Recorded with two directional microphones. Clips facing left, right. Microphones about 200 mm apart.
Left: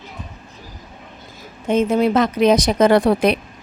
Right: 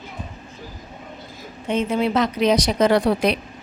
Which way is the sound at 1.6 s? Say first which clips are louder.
Left 5 dB; 45° left (ahead or behind).